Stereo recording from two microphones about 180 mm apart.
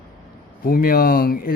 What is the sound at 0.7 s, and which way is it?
Speech, 55° left (ahead or behind).